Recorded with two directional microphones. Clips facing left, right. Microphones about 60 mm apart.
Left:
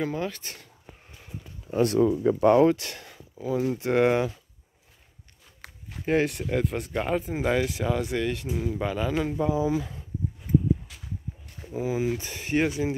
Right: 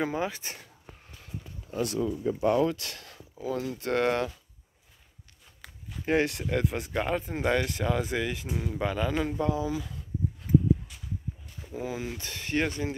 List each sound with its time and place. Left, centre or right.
0.0 s speech: centre
1.7 s speech: left
2.6 s speech: left
3.3 s speech: centre
3.6 s speech: left
3.9 s speech: centre
5.6 s walk: left
6.0 s speech: centre; by 10.0 s left
11.6 s speech: centre